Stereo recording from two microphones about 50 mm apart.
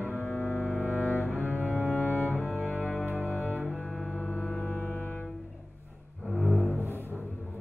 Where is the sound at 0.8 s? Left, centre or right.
Right.